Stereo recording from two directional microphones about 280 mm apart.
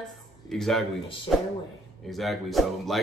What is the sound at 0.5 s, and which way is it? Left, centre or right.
Speech, centre.